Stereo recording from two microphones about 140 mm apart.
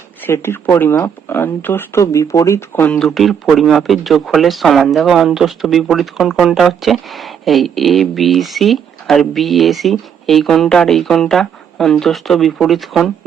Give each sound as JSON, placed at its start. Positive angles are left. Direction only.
{"t": 0.2, "sound": "speech", "side_deg": 15}